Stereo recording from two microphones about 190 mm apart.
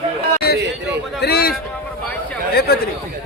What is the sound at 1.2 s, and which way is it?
Speech, 55° left (ahead or behind).